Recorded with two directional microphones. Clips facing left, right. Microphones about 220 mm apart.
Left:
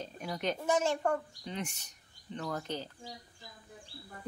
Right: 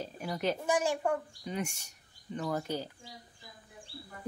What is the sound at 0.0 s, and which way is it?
Speech, 5° right (ahead or behind).